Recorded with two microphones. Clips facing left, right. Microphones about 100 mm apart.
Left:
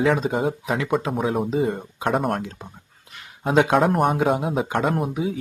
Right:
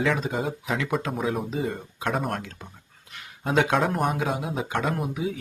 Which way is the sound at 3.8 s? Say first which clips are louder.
Left 5 dB; 50° left (ahead or behind).